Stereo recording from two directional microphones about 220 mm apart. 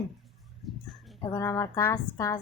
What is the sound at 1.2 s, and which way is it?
A woman's voice, 15° left (ahead or behind).